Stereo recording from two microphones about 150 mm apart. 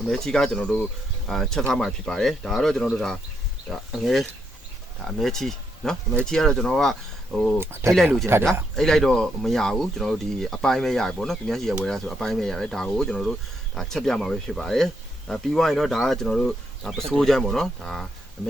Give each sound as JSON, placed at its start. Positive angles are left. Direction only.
{"t": 0.1, "sound": "speech", "side_deg": 5}
{"t": 7.6, "sound": "speech", "side_deg": -15}
{"t": 8.7, "sound": "speech", "side_deg": 0}